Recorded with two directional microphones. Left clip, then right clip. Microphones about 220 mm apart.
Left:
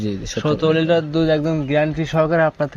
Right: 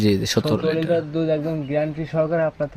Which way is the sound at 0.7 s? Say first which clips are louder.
Left 4 dB; 20° left (ahead or behind).